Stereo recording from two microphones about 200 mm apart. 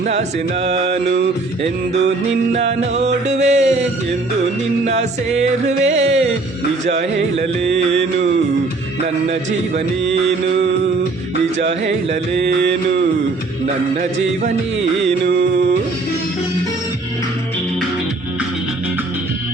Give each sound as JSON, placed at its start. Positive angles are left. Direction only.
{"t": 0.0, "sound": "music", "side_deg": -35}
{"t": 2.5, "sound": "music", "side_deg": -35}
{"t": 4.9, "sound": "music", "side_deg": -35}
{"t": 9.3, "sound": "music", "side_deg": -35}
{"t": 12.4, "sound": "mantra", "side_deg": -60}
{"t": 13.9, "sound": "music", "side_deg": -40}
{"t": 15.0, "sound": "mantra", "side_deg": -60}